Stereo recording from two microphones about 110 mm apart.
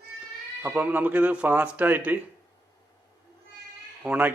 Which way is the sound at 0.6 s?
15° right (ahead or behind).